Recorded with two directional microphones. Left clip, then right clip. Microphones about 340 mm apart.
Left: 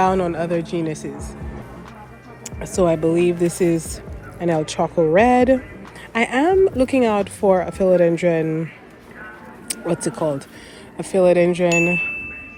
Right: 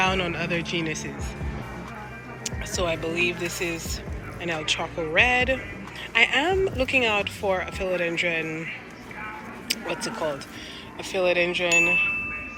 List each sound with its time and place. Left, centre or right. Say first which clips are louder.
0.0 s speech: left 6 dB; centre
2.6 s chime: left 9 dB; centre
4.4 s speech: left 7 dB; centre
9.6 s speech: left 5 dB; centre
10.9 s chime: left 8 dB; left